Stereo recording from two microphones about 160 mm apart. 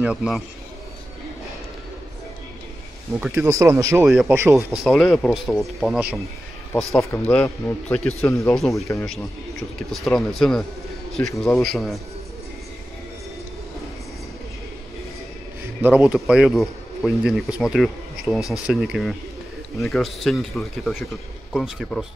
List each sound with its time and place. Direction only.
0.0 s speech: 5° right (ahead or behind)
3.3 s speech: 15° right (ahead or behind)
4.0 s speech: 5° right (ahead or behind)
4.4 s speech: 15° right (ahead or behind)
4.6 s speech: centre (ahead or behind)
7.0 s a man's voice: 15° left (ahead or behind)
8.5 s speech: centre (ahead or behind)
15.8 s speech: 10° right (ahead or behind)